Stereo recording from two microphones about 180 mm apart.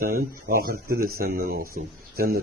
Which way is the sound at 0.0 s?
55° right (ahead or behind).